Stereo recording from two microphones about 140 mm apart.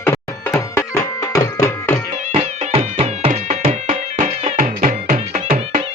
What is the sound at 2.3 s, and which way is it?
Music, 45° right (ahead or behind).